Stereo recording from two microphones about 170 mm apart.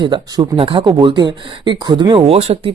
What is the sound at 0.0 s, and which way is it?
A man's voice, 25° right (ahead or behind).